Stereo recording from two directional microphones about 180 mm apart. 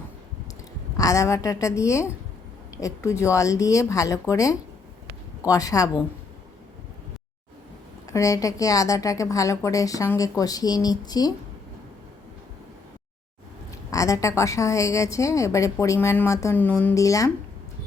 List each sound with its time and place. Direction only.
0.9 s a woman's voice: 20° left (ahead or behind)
8.0 s a woman's voice: 20° left (ahead or behind)
13.9 s a woman's voice: 20° left (ahead or behind)